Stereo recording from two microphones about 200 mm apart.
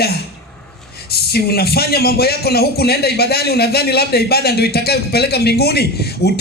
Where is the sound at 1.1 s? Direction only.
50° left (ahead or behind).